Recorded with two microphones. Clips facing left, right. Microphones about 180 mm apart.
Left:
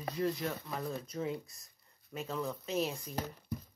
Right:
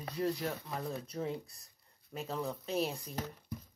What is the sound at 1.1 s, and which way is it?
Speech, 35° right (ahead or behind).